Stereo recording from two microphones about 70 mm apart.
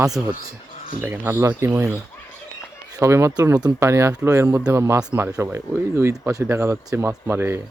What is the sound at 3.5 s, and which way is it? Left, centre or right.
Speech, right.